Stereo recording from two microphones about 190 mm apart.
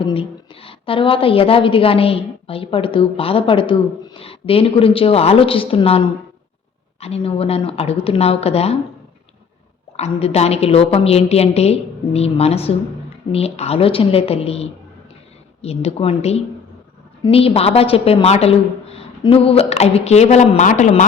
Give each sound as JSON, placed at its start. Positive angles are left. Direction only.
{"t": 0.0, "sound": "a woman's voice", "side_deg": 30}
{"t": 10.0, "sound": "a woman's voice", "side_deg": 35}